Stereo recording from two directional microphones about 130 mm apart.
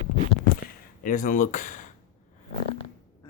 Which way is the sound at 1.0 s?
90° left.